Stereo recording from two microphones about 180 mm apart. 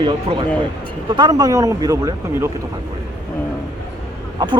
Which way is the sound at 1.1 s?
25° right (ahead or behind).